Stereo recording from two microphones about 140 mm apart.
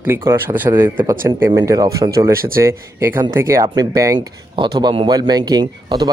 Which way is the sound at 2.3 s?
90° right.